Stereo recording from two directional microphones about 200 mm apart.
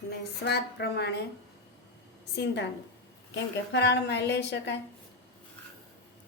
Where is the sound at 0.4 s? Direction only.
55° left (ahead or behind).